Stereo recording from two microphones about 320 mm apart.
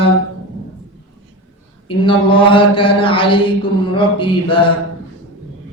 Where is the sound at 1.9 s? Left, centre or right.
Centre.